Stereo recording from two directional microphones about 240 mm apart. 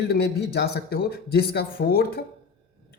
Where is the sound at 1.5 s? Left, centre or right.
Left.